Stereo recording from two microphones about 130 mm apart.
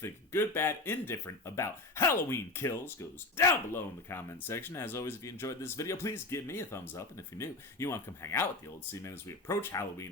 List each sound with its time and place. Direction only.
0.0 s speech: 15° left (ahead or behind)